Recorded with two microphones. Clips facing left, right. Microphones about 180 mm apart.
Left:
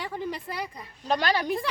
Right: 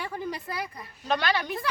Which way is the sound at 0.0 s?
15° left (ahead or behind).